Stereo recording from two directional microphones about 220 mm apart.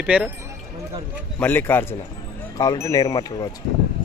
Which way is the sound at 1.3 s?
10° left (ahead or behind).